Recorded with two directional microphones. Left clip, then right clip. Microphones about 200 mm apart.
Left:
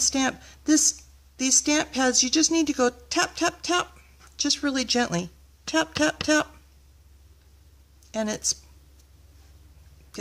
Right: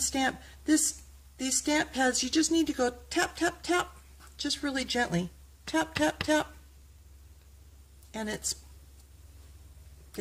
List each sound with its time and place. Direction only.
0.0 s a woman's voice: 30° left (ahead or behind)
8.1 s speech: 30° left (ahead or behind)